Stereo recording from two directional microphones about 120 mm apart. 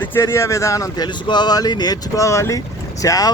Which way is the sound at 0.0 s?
20° left (ahead or behind).